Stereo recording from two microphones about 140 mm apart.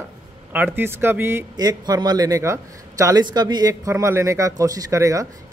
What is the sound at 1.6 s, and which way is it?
Speech, 30° right (ahead or behind).